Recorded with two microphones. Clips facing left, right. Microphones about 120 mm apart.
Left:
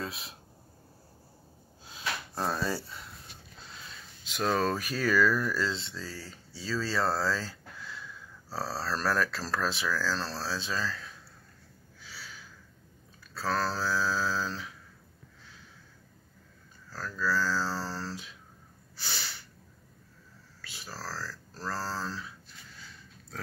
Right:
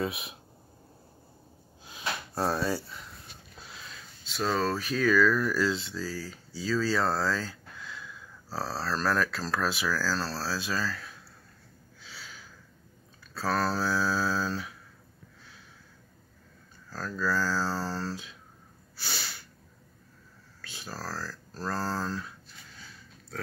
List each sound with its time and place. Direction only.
0.0 s speech: 5° right (ahead or behind)
1.9 s a sound: 5° right (ahead or behind)
4.2 s speech: 15° left (ahead or behind); by 5.8 s centre (ahead or behind)
5.8 s speech: 25° left (ahead or behind)
6.9 s speech: centre (ahead or behind)
12.1 s a sound: 15° right (ahead or behind)
13.3 s speech: 15° right (ahead or behind)
16.9 s speech: 15° right (ahead or behind)
18.9 s sneeze: 15° right (ahead or behind)
20.6 s speech: 15° right (ahead or behind)